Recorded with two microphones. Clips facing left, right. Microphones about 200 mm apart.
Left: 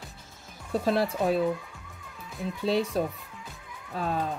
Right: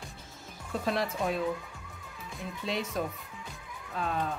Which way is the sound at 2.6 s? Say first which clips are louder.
Left 7 dB; 35° left (ahead or behind).